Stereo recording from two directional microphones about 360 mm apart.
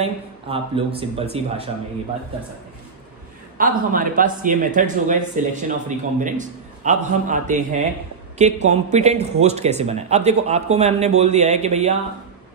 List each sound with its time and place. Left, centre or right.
0.0 s speech: centre
3.5 s speech: right